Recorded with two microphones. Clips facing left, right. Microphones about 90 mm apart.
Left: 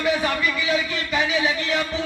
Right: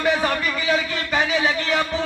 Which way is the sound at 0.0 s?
40° right (ahead or behind).